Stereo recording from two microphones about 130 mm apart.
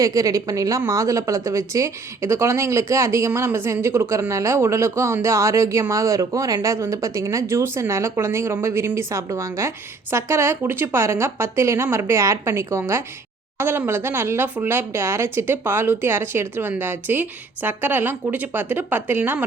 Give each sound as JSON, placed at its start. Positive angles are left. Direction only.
{"t": 0.0, "sound": "speech", "side_deg": -25}